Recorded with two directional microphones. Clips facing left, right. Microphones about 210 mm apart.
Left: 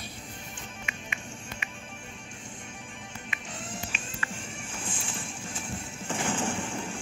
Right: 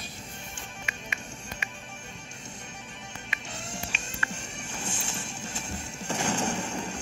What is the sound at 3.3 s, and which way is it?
Music, 45° right (ahead or behind).